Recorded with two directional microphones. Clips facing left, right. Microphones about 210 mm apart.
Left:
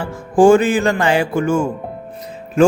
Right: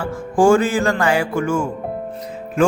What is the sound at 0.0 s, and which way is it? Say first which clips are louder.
Music: left 4 dB; 20° left (ahead or behind).